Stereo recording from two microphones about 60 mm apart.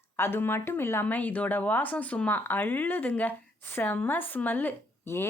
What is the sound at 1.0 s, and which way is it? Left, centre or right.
Speech, left.